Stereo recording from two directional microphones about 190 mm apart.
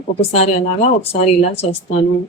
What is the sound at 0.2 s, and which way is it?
Speech, 35° left (ahead or behind).